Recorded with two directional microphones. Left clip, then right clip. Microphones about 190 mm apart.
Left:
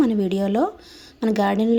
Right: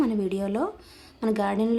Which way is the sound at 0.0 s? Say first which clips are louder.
Left 5 dB; 20° left (ahead or behind).